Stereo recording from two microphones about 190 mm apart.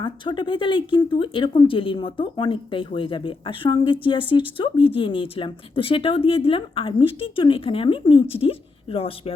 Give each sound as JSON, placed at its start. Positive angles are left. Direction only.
{"t": 0.0, "sound": "a woman's voice", "side_deg": 25}